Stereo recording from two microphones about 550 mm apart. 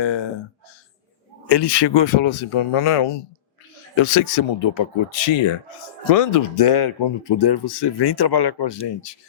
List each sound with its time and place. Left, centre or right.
0.0 s speech: left
1.5 s speech: left
3.9 s speech: left
6.1 s speech: left